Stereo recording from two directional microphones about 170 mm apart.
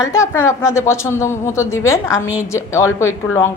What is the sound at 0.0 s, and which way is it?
A woman's voice, 20° left (ahead or behind).